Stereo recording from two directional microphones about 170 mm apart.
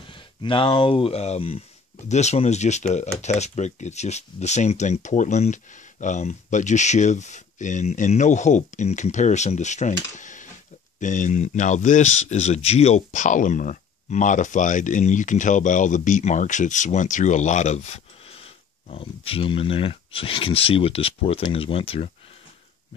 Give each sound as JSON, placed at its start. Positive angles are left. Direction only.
{"t": 0.1, "sound": "speech", "side_deg": 30}